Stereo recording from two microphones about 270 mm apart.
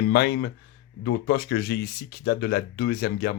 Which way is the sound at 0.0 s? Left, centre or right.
Left.